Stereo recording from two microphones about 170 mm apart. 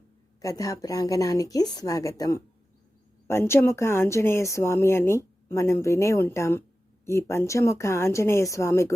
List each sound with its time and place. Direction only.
0.4 s speech: 20° left (ahead or behind)